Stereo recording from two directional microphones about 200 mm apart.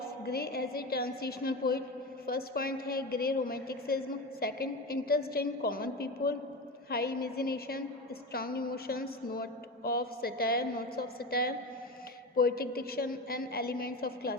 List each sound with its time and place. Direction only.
0.0 s a woman's voice: 50° left (ahead or behind)